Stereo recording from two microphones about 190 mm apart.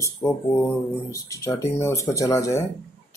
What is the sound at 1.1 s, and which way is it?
Speech, 15° left (ahead or behind).